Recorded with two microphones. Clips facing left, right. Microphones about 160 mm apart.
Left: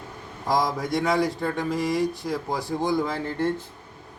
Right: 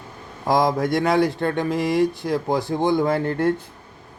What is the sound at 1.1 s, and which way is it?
Speech, 70° right (ahead or behind).